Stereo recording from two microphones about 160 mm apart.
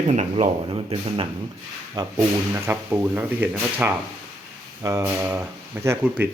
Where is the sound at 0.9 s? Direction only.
35° right (ahead or behind).